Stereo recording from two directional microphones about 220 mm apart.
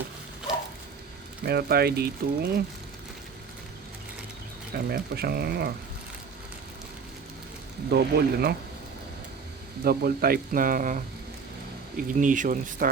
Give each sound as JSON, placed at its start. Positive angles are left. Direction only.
{"t": 1.5, "sound": "speech", "side_deg": -45}
{"t": 4.7, "sound": "speech", "side_deg": -45}
{"t": 7.9, "sound": "speech", "side_deg": -45}
{"t": 9.8, "sound": "speech", "side_deg": -45}
{"t": 12.1, "sound": "speech", "side_deg": -35}